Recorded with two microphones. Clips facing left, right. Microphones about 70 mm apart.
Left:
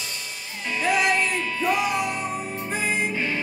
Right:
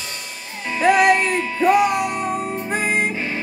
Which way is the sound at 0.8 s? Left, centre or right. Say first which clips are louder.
Right 7 dB; right.